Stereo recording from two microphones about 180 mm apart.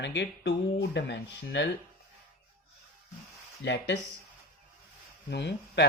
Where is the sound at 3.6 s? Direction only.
75° left (ahead or behind).